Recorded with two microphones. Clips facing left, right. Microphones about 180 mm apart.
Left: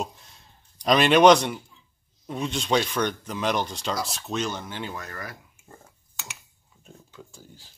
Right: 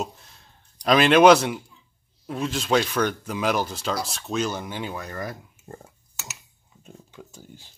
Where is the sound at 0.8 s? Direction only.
Centre (ahead or behind); by 5.4 s 20° right (ahead or behind).